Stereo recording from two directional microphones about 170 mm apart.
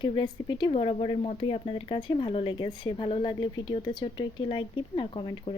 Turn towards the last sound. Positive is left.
turn(degrees=30)  # may be behind; listen again after turning